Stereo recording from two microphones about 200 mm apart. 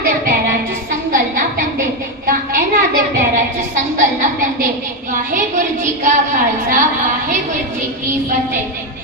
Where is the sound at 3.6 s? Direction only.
40° right (ahead or behind).